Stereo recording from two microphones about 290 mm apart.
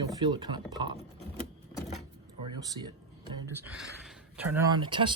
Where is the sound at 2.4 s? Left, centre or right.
Centre.